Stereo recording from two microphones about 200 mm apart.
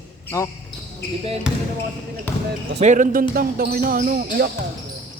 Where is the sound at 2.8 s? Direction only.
40° right (ahead or behind).